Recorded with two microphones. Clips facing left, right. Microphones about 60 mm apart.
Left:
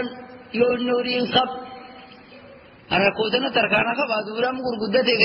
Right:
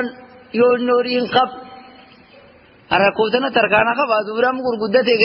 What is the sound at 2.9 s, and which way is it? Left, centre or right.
A man's voice, right.